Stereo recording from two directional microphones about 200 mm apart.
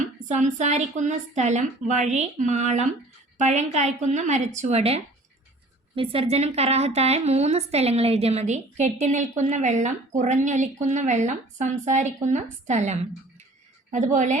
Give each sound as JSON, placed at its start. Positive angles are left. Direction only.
{"t": 0.0, "sound": "a woman's voice", "side_deg": -35}